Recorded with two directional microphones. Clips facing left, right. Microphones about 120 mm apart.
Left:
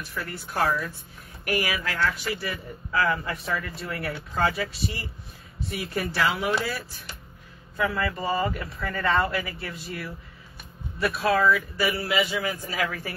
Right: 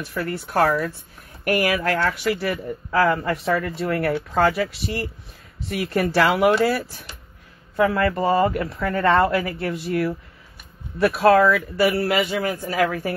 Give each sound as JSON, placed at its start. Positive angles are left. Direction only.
{"t": 0.1, "sound": "a man's voice", "side_deg": -55}
{"t": 11.8, "sound": "a man's voice", "side_deg": -55}